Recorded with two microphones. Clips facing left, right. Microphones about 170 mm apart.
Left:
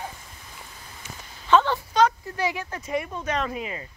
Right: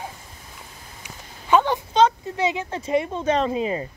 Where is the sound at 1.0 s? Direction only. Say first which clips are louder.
Right 1 dB; 15° right (ahead or behind).